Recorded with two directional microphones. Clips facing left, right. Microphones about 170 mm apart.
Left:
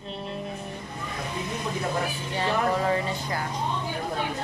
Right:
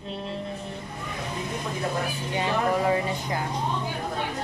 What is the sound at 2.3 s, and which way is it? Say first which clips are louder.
Speech: right 1 dB; 15° right (ahead or behind).